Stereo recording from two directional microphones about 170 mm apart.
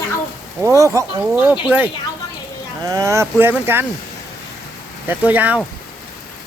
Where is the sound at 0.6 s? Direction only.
20° right (ahead or behind).